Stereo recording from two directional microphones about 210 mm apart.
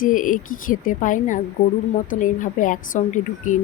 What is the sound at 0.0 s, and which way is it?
A woman's voice, 40° left (ahead or behind).